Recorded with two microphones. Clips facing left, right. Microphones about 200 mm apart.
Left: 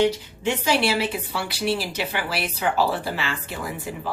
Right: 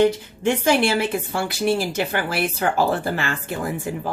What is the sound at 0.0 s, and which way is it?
A woman's voice, 50° right (ahead or behind).